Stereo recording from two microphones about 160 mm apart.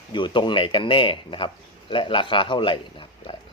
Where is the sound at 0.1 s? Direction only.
30° left (ahead or behind).